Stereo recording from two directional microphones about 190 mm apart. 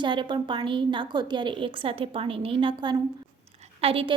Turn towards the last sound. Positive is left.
turn(degrees=-30)  # may be behind; listen again after turning